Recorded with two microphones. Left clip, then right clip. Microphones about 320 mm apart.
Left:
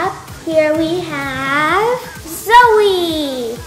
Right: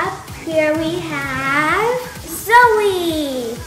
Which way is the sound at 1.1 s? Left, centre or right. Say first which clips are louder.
Left 1 dB; left.